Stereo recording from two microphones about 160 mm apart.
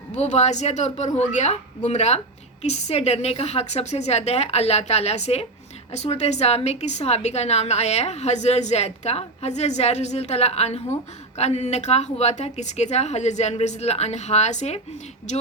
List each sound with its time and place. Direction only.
0.2 s a woman's voice: 45° left (ahead or behind)